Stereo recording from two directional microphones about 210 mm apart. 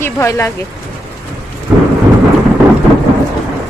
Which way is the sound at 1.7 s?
5° right (ahead or behind).